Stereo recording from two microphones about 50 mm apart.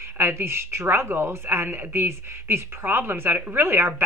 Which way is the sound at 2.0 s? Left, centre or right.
Right.